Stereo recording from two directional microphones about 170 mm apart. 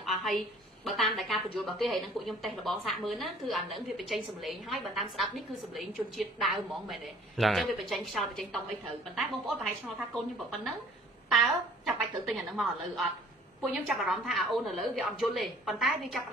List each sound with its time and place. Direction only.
0.0 s a sound: centre (ahead or behind)
0.8 s a woman's voice: centre (ahead or behind)
11.2 s a woman's voice: centre (ahead or behind)